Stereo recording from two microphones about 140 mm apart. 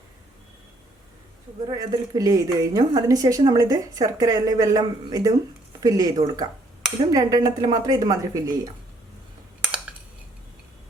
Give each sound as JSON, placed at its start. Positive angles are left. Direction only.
{"t": 1.6, "sound": "a woman's voice", "side_deg": -30}